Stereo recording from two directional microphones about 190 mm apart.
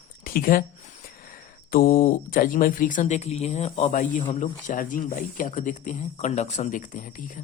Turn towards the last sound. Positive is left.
turn(degrees=45)  # may be behind; listen again after turning